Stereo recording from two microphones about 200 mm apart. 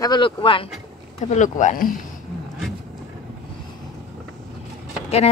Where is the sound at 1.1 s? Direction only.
35° left (ahead or behind).